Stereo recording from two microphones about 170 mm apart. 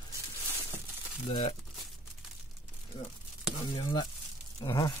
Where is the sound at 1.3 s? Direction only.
35° left (ahead or behind).